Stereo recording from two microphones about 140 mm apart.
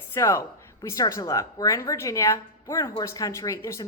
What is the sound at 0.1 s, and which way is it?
Speech, 20° left (ahead or behind).